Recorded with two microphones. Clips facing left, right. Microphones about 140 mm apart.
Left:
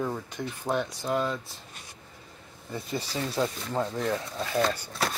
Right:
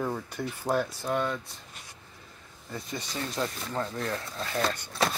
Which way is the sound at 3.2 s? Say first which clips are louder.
Left 3 dB; 10° left (ahead or behind).